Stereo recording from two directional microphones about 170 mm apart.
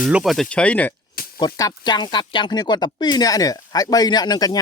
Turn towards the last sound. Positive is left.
turn(degrees=25)  # may be behind; listen again after turning